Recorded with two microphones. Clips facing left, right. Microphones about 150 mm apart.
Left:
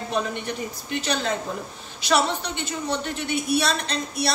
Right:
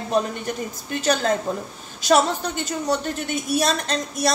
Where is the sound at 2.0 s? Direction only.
45° right (ahead or behind).